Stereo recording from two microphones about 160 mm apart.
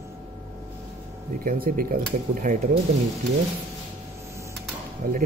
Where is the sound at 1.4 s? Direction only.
60° right (ahead or behind).